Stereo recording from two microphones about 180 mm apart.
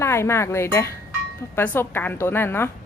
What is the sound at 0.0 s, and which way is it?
Speech, 15° left (ahead or behind).